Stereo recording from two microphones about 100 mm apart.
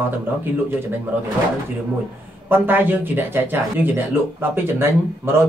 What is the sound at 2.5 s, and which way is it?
Speech, 20° right (ahead or behind).